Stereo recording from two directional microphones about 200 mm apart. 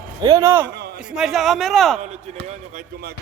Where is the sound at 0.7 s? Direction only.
55° right (ahead or behind).